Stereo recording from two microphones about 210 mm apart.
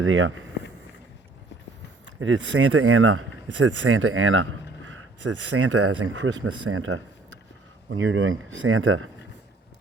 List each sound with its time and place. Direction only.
0.0 s speech: 65° right (ahead or behind)
2.0 s speech: 65° right (ahead or behind)
5.5 s speech: 80° right
7.9 s speech: 65° right (ahead or behind)